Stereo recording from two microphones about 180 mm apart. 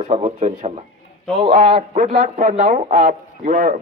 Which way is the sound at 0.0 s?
40° right (ahead or behind).